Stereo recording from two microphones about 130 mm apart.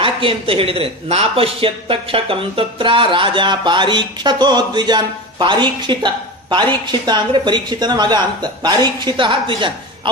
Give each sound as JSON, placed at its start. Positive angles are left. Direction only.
{"t": 0.0, "sound": "speech", "side_deg": -45}